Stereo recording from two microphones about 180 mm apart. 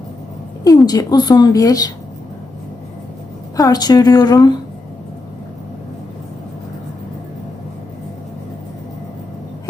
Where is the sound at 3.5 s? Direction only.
20° left (ahead or behind).